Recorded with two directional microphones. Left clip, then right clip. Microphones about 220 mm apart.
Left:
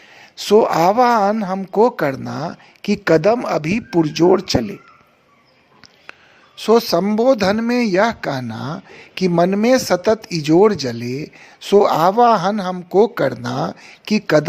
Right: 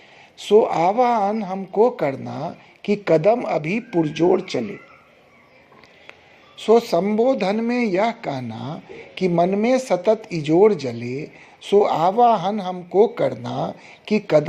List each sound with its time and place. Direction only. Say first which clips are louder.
0.2 s speech: left 2 dB; 45° left (ahead or behind)
6.6 s speech: left 2 dB; 45° left (ahead or behind)